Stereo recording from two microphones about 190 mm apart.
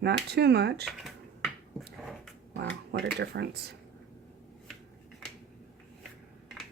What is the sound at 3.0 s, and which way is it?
Speech, 60° right (ahead or behind).